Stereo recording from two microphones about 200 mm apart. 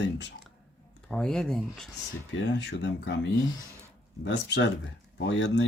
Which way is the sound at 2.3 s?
65° left (ahead or behind).